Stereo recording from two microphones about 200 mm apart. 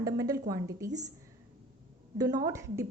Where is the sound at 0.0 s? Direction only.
15° right (ahead or behind).